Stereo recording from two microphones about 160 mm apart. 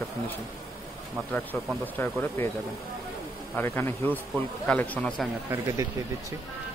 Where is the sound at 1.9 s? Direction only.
10° left (ahead or behind).